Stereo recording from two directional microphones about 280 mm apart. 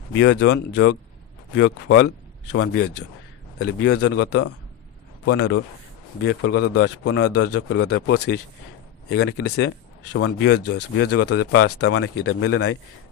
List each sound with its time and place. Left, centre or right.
0.1 s a man's voice: left
3.5 s speech: left
5.3 s speech: left
11.2 s speech: left